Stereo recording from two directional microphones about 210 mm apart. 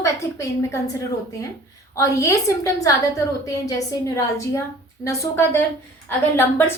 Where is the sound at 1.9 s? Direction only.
15° left (ahead or behind).